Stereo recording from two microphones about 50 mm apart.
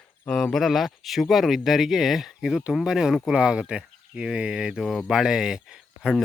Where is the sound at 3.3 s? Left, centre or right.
Right.